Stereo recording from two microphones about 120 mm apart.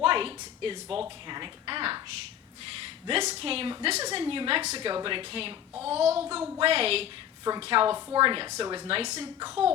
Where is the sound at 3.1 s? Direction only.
50° right (ahead or behind).